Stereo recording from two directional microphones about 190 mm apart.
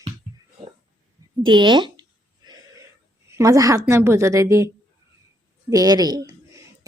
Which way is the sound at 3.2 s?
15° right (ahead or behind).